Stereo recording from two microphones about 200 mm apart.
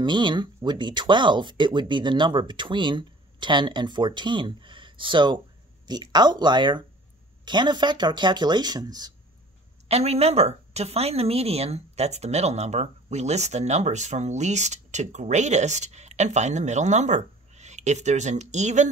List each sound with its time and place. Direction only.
0.0 s speech: 25° right (ahead or behind)
9.8 s speech: 30° right (ahead or behind)